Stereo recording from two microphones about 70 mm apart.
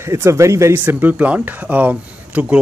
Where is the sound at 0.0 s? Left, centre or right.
Right.